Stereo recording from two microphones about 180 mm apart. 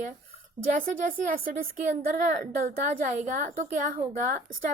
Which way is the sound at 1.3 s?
50° right (ahead or behind).